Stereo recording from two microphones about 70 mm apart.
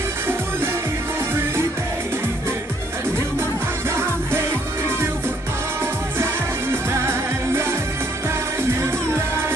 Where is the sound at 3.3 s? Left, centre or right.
Right.